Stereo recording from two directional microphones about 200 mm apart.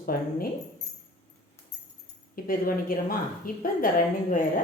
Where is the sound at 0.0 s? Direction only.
45° left (ahead or behind).